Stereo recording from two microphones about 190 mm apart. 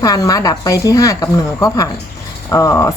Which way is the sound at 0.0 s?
20° left (ahead or behind).